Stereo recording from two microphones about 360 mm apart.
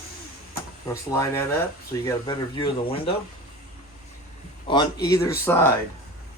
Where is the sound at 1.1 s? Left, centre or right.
Centre.